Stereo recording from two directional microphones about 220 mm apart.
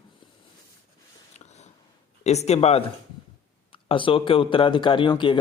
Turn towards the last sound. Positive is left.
turn(degrees=20)  # may be behind; listen again after turning